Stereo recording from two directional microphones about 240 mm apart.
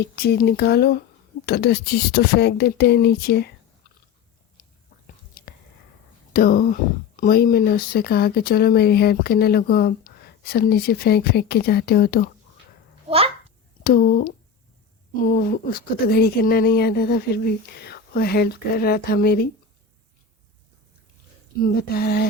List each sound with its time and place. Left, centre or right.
0.0 s speech: left
4.6 s chewing: left
6.3 s speech: left
13.1 s a child's voice: right
13.8 s speech: left
21.6 s speech: left